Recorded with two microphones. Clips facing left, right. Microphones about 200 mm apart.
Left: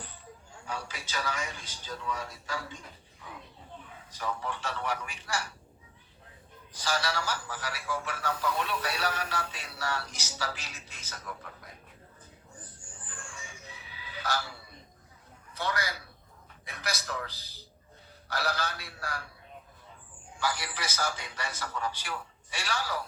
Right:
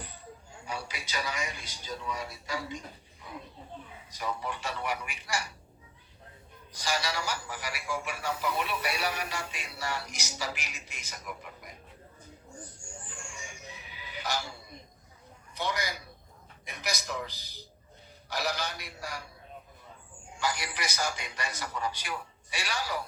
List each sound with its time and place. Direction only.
0.6 s a man's voice: 10° right (ahead or behind)
6.8 s a man's voice: 10° right (ahead or behind)
12.8 s a sound: 10° right (ahead or behind)
15.5 s a man's voice: 15° right (ahead or behind)
20.4 s a man's voice: 15° right (ahead or behind)